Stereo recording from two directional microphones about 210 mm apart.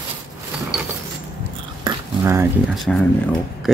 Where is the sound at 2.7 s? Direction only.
Centre (ahead or behind).